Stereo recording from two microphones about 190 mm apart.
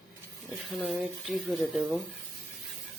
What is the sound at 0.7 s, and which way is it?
Speech, 5° right (ahead or behind).